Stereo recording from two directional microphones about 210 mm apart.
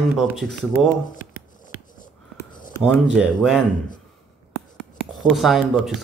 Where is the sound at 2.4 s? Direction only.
15° left (ahead or behind).